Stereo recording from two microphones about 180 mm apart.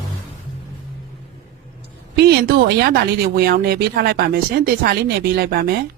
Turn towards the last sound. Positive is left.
turn(degrees=-60)  # may be behind; listen again after turning